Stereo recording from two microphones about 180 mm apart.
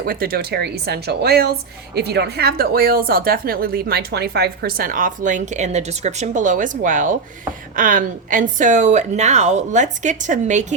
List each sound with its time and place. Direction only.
0.0 s a woman's voice: 55° right (ahead or behind)